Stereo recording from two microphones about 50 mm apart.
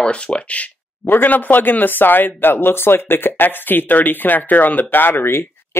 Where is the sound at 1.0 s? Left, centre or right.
Left.